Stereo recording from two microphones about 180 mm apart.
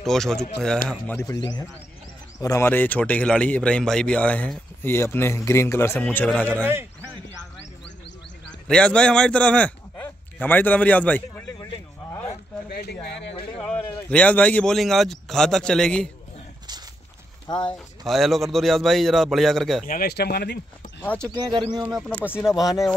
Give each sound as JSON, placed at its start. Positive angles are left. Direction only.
{"t": 0.0, "sound": "a man's voice", "side_deg": 0}
{"t": 2.4, "sound": "speech", "side_deg": 15}
{"t": 6.5, "sound": "speech", "side_deg": -10}
{"t": 8.6, "sound": "a man's voice", "side_deg": 5}
{"t": 12.6, "sound": "speech", "side_deg": 60}
{"t": 13.6, "sound": "a man's voice", "side_deg": 5}
{"t": 17.5, "sound": "speech", "side_deg": 25}
{"t": 18.0, "sound": "a man's voice", "side_deg": 0}
{"t": 19.9, "sound": "speech", "side_deg": 60}
{"t": 21.0, "sound": "speech", "side_deg": 10}
{"t": 21.3, "sound": "speech", "side_deg": -25}
{"t": 22.6, "sound": "a man's voice", "side_deg": 0}